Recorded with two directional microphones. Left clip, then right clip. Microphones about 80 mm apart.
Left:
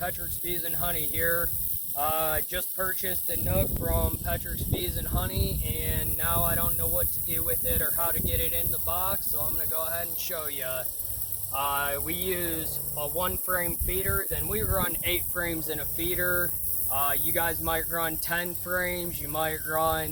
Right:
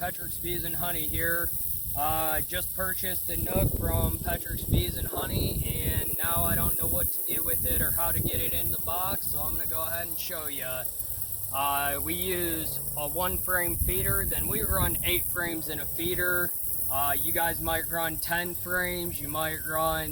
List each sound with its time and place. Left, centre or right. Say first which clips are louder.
0.0 s speech: even; left
2.9 s speech: left 1 dB; left
9.6 s speech: left 1 dB; left
14.8 s speech: even; left
16.9 s speech: even; left
18.6 s speech: even; left